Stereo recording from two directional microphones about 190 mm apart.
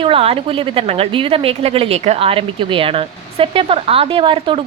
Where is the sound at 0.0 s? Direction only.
30° right (ahead or behind).